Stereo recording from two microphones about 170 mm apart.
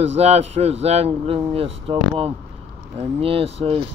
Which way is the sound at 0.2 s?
40° right (ahead or behind).